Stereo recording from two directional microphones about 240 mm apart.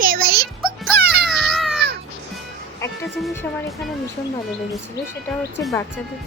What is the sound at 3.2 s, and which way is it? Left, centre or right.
Speech, centre.